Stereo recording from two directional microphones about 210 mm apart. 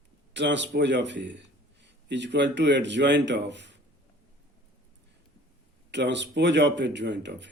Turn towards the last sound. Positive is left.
turn(degrees=-55)  # may be behind; listen again after turning